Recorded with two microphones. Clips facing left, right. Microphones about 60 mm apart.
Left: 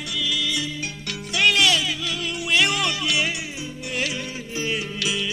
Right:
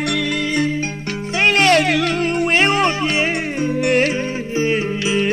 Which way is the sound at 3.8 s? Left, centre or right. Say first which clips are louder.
Right 11 dB; right.